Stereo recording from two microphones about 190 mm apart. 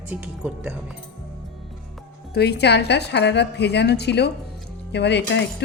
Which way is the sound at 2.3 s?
60° left (ahead or behind).